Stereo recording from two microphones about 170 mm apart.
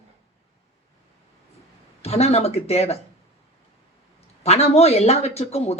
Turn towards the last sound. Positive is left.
turn(degrees=35)  # may be behind; listen again after turning